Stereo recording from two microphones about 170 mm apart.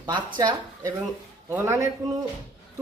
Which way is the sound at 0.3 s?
25° right (ahead or behind).